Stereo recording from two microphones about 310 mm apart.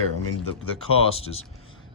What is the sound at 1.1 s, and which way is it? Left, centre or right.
Speech, centre.